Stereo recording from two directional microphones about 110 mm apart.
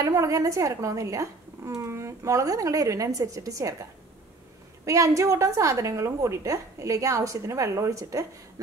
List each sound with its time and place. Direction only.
0.0 s speech: 30° right (ahead or behind)
4.8 s speech: 30° right (ahead or behind)